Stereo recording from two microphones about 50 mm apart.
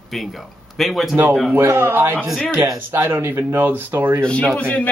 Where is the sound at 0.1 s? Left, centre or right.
Centre.